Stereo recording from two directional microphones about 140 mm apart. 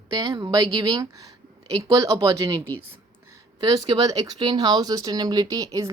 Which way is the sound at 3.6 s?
30° right (ahead or behind).